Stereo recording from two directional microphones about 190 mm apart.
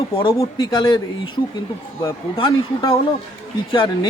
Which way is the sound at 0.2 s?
20° left (ahead or behind).